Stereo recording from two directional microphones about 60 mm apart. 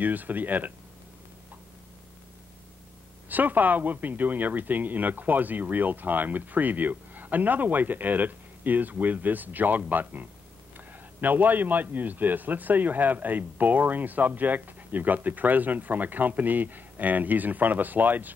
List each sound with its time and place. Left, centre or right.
0.0 s a man's voice: right
3.3 s a man's voice: right